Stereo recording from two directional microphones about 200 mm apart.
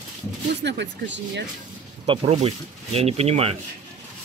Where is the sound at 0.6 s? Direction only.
60° right (ahead or behind).